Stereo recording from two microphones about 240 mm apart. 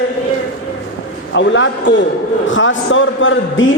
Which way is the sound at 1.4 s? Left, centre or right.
Left.